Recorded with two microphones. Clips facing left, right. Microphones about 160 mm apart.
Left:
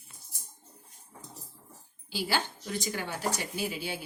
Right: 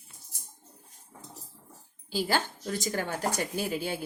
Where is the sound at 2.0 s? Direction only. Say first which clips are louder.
Right 3 dB; 45° right (ahead or behind).